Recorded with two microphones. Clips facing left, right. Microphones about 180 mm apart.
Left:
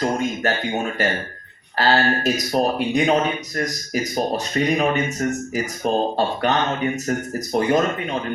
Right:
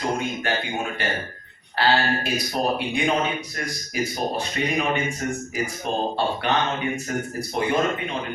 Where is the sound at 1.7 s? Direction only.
40° left (ahead or behind).